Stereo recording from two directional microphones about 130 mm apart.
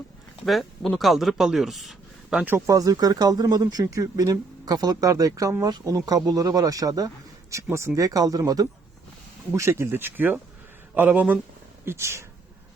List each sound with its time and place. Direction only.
0.4 s speech: centre (ahead or behind); by 12.2 s 20° right (ahead or behind)